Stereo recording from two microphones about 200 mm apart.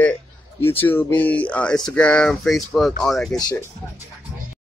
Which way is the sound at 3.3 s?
20° left (ahead or behind).